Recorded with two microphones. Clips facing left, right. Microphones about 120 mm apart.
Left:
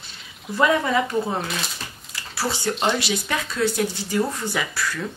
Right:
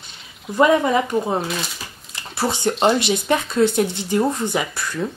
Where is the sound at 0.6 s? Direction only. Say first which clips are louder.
Right 4 dB; 20° right (ahead or behind).